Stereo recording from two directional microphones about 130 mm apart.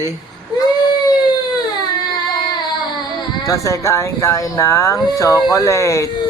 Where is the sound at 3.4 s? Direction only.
25° left (ahead or behind).